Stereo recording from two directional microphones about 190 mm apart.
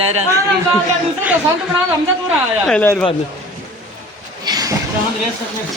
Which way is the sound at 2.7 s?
5° left (ahead or behind).